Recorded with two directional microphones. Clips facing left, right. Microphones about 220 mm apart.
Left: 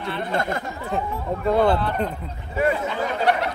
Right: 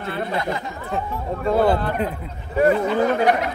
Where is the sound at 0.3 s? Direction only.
50° left (ahead or behind).